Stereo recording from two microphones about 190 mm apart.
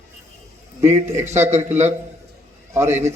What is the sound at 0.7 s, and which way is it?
A man's voice, 15° right (ahead or behind).